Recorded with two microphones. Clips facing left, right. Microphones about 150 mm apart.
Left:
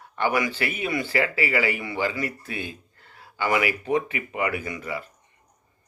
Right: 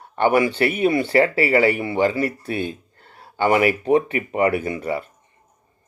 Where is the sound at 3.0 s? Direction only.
30° right (ahead or behind).